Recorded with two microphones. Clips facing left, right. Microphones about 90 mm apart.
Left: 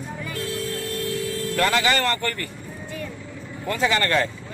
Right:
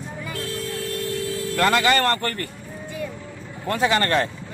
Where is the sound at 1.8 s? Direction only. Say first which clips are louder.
Right 2 dB; 55° right (ahead or behind).